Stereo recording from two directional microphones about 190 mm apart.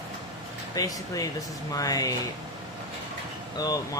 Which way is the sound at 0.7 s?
20° left (ahead or behind).